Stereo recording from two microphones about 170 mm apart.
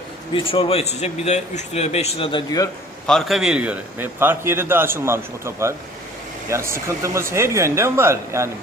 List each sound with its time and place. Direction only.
0.3 s a man's voice: 30° left (ahead or behind)
3.1 s a man's voice: centre (ahead or behind); by 8.4 s 15° right (ahead or behind)